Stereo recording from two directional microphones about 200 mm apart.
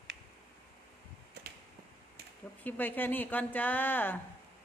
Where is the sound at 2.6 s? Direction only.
10° left (ahead or behind).